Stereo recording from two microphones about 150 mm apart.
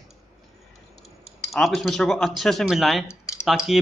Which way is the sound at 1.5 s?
Centre (ahead or behind).